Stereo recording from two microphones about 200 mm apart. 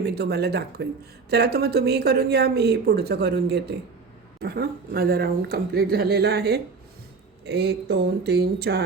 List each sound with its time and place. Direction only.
0.0 s a woman's voice: 55° right (ahead or behind)